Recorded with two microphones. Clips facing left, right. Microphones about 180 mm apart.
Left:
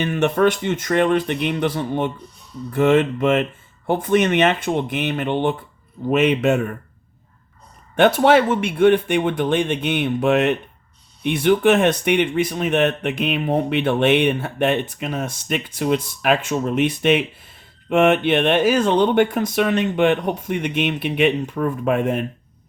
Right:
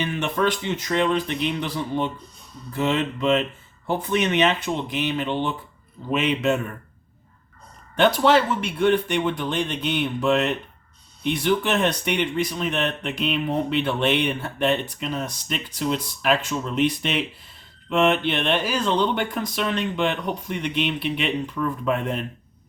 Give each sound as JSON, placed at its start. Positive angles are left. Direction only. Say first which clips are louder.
{"t": 0.0, "sound": "speech", "louder": "left 6 dB", "side_deg": 55}
{"t": 7.9, "sound": "speech", "louder": "left 4 dB", "side_deg": 55}